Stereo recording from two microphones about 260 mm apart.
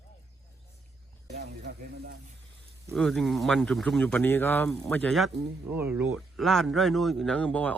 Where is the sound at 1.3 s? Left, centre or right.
Right.